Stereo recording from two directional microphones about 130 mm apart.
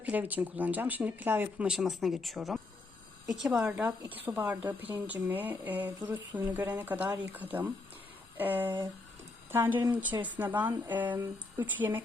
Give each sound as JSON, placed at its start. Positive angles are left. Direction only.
{"t": 0.0, "sound": "speech", "side_deg": -10}